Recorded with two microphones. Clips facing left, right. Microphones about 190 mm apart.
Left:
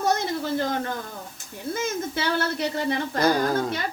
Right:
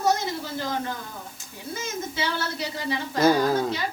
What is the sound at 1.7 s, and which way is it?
Speech, 55° left (ahead or behind).